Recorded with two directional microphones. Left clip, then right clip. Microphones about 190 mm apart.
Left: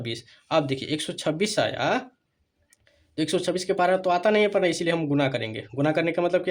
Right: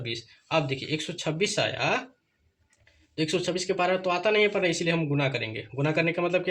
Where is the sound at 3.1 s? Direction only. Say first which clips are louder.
Left 2 dB; 55° left (ahead or behind).